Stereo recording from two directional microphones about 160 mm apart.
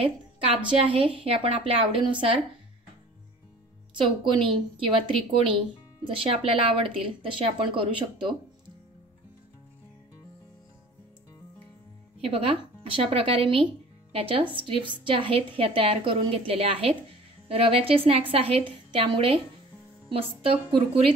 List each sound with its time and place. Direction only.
0.7 s a woman's voice: 35° right (ahead or behind)
3.9 s a woman's voice: 30° right (ahead or behind)
12.2 s a woman's voice: 35° right (ahead or behind)